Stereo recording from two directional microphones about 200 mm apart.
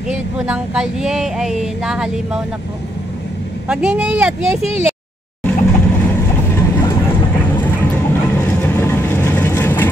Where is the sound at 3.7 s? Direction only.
5° right (ahead or behind).